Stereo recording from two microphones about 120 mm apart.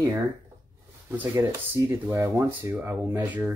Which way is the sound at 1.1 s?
20° right (ahead or behind).